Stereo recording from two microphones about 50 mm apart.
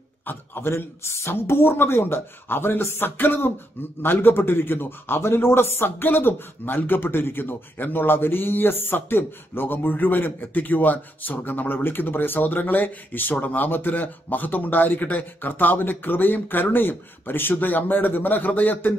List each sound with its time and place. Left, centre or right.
0.3 s a man's voice: left